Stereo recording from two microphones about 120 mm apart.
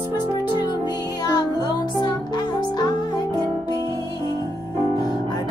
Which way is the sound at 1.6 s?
40° left (ahead or behind).